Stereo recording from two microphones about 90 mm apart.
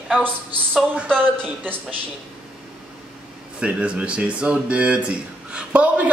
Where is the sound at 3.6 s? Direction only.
10° right (ahead or behind).